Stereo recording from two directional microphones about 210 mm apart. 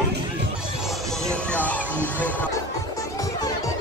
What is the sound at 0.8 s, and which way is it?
Music, centre (ahead or behind).